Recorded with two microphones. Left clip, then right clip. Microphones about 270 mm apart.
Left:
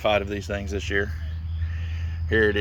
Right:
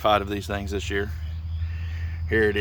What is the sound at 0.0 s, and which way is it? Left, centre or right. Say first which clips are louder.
Speech: right 1 dB; centre.